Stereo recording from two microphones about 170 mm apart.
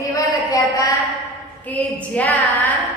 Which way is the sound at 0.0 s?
20° left (ahead or behind).